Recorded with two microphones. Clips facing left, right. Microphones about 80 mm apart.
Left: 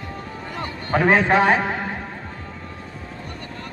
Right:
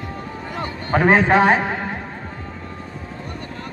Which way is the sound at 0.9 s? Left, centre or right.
Right.